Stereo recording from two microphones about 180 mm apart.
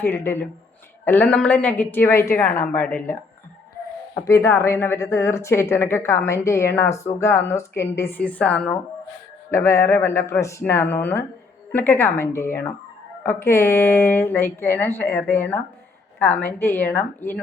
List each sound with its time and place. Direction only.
0.0 s speech: 15° left (ahead or behind)